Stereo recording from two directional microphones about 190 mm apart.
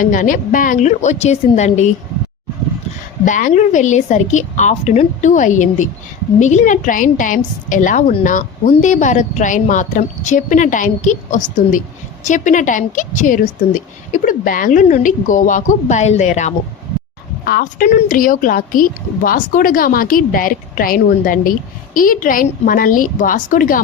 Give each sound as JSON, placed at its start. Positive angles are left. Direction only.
{"t": 0.0, "sound": "a woman's voice", "side_deg": 45}
{"t": 3.2, "sound": "a woman's voice", "side_deg": 40}
{"t": 17.4, "sound": "a woman's voice", "side_deg": 50}